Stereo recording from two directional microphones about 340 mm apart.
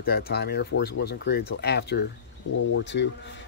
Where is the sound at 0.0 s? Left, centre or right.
Left.